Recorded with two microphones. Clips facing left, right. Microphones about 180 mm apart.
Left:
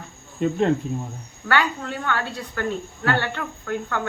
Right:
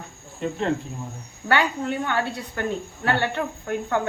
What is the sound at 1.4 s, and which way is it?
Speech, 20° right (ahead or behind).